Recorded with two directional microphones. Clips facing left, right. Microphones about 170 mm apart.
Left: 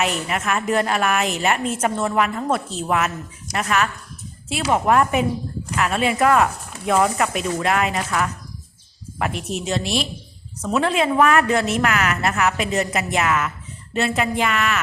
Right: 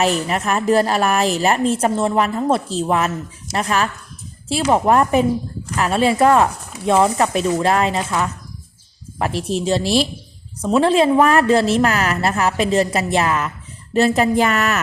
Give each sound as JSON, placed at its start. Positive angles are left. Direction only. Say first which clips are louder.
{"t": 0.0, "sound": "a woman's voice", "louder": "right 4 dB", "side_deg": -35}